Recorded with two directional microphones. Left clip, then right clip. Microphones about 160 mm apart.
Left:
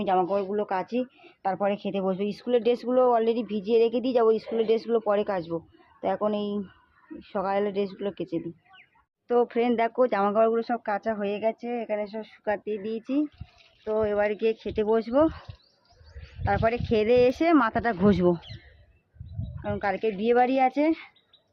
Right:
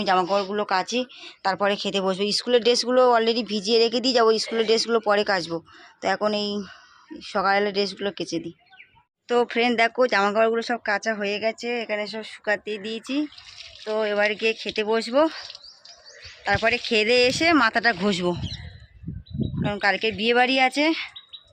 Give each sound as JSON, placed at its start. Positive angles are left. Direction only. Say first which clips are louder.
{"t": 0.0, "sound": "speech", "louder": "right 3 dB", "side_deg": -5}
{"t": 18.0, "sound": "speech", "louder": "left 2 dB", "side_deg": 35}
{"t": 19.6, "sound": "speech", "louder": "right 4 dB", "side_deg": -5}